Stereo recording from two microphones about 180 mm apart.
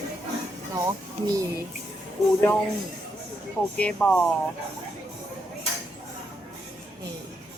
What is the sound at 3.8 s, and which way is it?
Speech, 5° left (ahead or behind).